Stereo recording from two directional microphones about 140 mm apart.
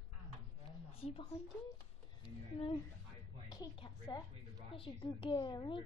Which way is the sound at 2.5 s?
45° left (ahead or behind).